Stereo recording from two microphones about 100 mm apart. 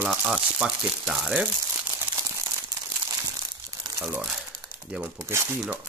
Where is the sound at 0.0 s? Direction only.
10° right (ahead or behind).